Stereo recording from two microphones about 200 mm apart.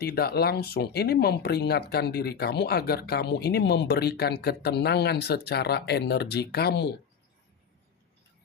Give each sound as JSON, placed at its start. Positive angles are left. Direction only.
{"t": 0.0, "sound": "speech", "side_deg": 50}